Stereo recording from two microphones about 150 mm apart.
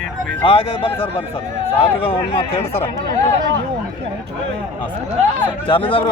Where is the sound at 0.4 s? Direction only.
40° left (ahead or behind).